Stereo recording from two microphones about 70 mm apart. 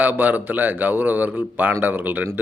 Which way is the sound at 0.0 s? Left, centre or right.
Right.